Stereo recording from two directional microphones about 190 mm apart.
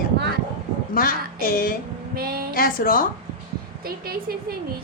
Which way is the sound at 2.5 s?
50° left (ahead or behind).